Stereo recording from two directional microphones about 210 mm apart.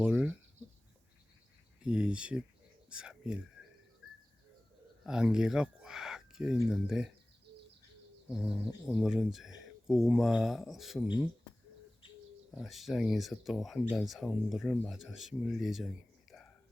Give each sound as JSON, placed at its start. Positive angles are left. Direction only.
{"t": 0.0, "sound": "a sound", "side_deg": -5}
{"t": 1.8, "sound": "speech", "side_deg": -5}
{"t": 5.0, "sound": "speech", "side_deg": -5}
{"t": 7.5, "sound": "bird", "side_deg": -55}
{"t": 8.5, "sound": "speech", "side_deg": -5}
{"t": 12.5, "sound": "speech", "side_deg": 0}